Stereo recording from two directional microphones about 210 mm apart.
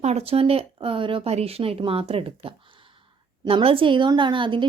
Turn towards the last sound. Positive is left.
turn(degrees=-25)  # may be behind; listen again after turning